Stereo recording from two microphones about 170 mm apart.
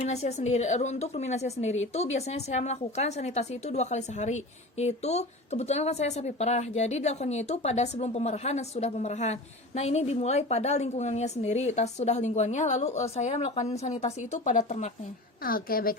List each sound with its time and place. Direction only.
0.0 s a woman's voice: 40° left (ahead or behind)
15.4 s a woman's voice: 60° left (ahead or behind)